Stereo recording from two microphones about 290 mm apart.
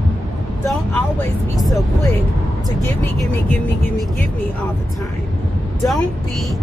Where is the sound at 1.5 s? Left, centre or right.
Centre.